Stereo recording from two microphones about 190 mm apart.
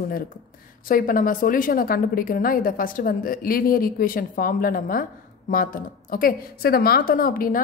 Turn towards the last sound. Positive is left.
turn(degrees=45)  # may be behind; listen again after turning